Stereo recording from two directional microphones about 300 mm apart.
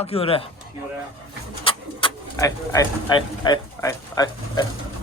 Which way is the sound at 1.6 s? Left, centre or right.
Centre.